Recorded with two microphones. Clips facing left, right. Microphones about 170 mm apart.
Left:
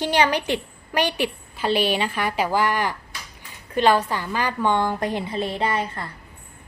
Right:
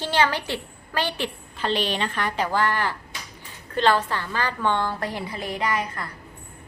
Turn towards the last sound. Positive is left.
turn(degrees=25)  # may be behind; listen again after turning